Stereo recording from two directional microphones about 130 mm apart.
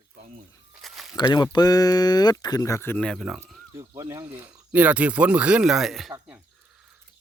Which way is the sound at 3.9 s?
30° right (ahead or behind).